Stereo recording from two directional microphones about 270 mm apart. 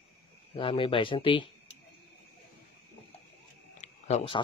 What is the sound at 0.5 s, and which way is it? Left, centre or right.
Speech, centre.